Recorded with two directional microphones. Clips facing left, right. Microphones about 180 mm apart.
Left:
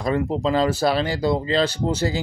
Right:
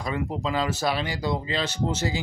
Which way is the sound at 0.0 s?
35° left (ahead or behind).